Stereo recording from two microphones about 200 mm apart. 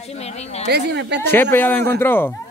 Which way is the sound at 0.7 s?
55° right (ahead or behind).